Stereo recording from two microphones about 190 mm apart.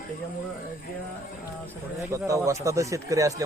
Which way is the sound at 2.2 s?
15° right (ahead or behind).